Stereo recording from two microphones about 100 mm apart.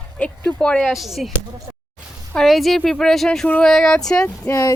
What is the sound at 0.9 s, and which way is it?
Speech, centre (ahead or behind).